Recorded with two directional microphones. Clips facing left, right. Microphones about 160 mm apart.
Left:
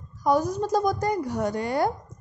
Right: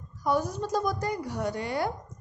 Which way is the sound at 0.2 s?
40° left (ahead or behind).